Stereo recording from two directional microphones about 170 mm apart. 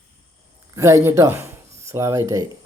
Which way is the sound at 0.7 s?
15° right (ahead or behind).